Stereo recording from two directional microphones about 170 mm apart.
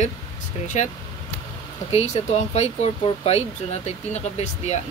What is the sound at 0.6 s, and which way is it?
Speech, 45° left (ahead or behind).